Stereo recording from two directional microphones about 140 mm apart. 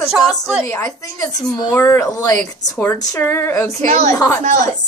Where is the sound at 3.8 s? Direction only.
60° right (ahead or behind).